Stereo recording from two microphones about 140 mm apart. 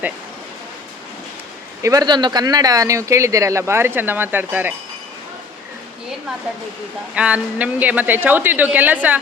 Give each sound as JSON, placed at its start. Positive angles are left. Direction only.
{"t": 1.8, "sound": "speech", "side_deg": -25}
{"t": 7.2, "sound": "speech", "side_deg": -10}